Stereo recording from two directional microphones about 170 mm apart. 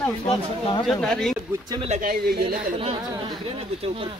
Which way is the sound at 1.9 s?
55° right (ahead or behind).